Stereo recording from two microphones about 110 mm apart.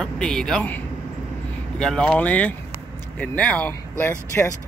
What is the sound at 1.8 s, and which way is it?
Speech, 10° left (ahead or behind).